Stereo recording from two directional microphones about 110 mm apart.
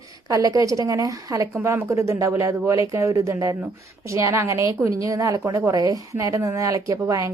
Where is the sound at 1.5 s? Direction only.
20° right (ahead or behind).